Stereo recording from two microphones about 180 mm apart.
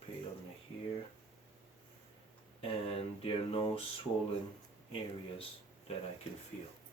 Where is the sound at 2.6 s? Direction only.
30° left (ahead or behind).